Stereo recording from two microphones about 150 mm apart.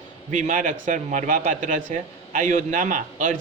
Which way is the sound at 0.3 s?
55° right (ahead or behind).